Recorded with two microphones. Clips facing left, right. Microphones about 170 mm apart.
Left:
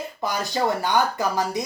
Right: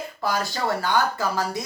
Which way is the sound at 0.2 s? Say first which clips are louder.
Left 1 dB; 20° left (ahead or behind).